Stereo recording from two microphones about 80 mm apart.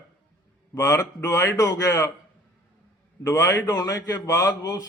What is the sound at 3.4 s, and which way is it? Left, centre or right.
A man's voice, left.